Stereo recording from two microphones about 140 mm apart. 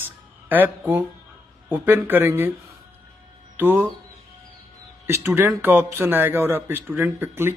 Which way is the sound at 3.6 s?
15° right (ahead or behind).